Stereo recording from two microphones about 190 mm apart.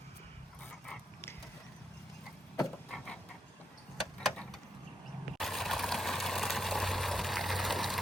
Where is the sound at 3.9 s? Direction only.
Centre (ahead or behind).